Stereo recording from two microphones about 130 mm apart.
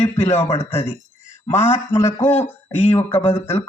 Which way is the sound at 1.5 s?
60° left (ahead or behind).